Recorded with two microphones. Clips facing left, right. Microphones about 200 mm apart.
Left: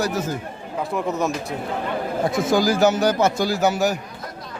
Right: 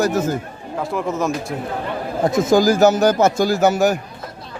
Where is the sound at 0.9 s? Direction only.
Centre (ahead or behind).